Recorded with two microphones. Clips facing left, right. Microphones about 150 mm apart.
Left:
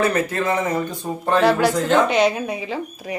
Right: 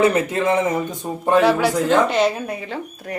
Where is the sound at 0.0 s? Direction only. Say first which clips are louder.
Right 3 dB; 20° right (ahead or behind).